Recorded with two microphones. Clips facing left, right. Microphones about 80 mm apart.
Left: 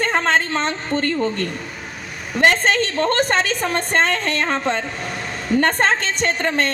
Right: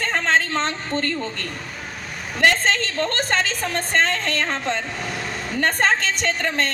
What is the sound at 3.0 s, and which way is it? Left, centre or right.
Speech, left.